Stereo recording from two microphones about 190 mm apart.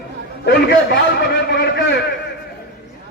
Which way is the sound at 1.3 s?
60° left (ahead or behind).